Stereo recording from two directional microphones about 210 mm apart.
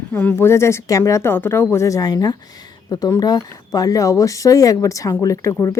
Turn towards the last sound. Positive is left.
turn(degrees=15)  # may be behind; listen again after turning